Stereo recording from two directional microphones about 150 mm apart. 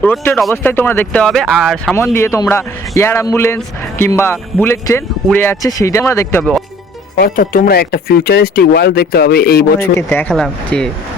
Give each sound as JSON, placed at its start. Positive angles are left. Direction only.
{"t": 0.0, "sound": "a man's voice", "side_deg": 15}
{"t": 7.2, "sound": "speech", "side_deg": 70}
{"t": 10.1, "sound": "a man's voice", "side_deg": 10}